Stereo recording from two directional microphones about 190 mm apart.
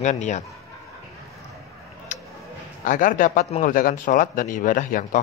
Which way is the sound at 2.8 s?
45° left (ahead or behind).